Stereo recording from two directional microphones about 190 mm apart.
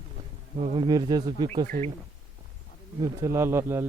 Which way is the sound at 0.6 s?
35° right (ahead or behind).